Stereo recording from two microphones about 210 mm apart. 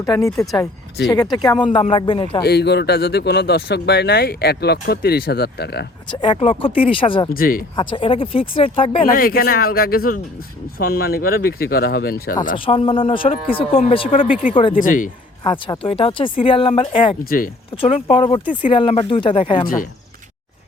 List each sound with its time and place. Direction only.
0.0 s speech: 15° left (ahead or behind)
2.4 s speech: 50° left (ahead or behind)
6.1 s speech: 25° left (ahead or behind)
7.3 s speech: 45° left (ahead or behind)
7.8 s speech: 25° left (ahead or behind)
9.0 s speech: 45° left (ahead or behind)
12.5 s speech: 25° left (ahead or behind)
14.8 s speech: 40° left (ahead or behind)
15.4 s speech: 25° left (ahead or behind)
17.2 s speech: 40° left (ahead or behind)
17.7 s speech: 30° left (ahead or behind)
19.6 s speech: 40° left (ahead or behind)